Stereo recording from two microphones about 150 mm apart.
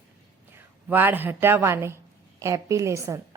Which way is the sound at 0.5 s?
15° right (ahead or behind).